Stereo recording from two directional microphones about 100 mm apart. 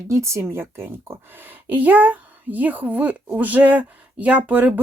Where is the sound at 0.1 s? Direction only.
30° right (ahead or behind).